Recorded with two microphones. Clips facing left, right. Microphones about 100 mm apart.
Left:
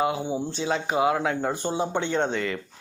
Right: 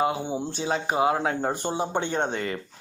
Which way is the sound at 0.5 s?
40° right (ahead or behind).